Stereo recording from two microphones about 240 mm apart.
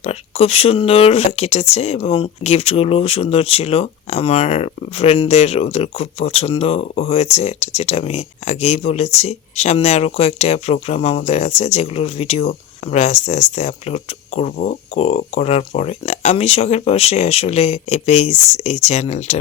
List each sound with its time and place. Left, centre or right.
0.0 s speech: left